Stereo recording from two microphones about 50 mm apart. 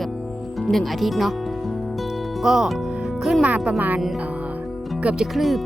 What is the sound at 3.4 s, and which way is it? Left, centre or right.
Speech, right.